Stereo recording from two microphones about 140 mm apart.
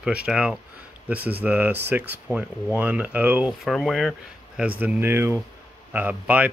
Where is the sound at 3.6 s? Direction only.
Centre (ahead or behind).